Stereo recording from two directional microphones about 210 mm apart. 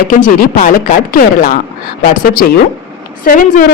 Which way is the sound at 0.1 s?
40° left (ahead or behind).